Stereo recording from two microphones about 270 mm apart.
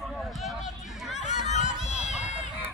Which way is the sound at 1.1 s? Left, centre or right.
Left.